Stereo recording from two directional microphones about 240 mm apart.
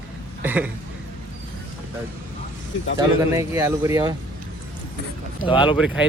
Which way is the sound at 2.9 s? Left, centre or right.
Centre.